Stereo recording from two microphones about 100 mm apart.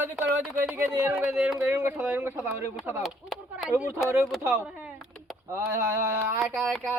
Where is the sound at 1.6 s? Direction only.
25° right (ahead or behind).